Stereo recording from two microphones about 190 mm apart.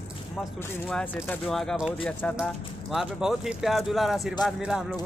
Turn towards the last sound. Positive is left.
turn(degrees=-5)  # may be behind; listen again after turning